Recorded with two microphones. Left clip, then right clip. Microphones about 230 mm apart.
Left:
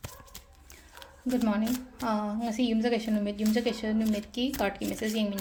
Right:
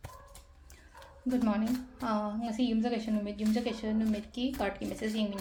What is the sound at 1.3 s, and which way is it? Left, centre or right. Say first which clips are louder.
A woman's voice: left 2 dB; centre.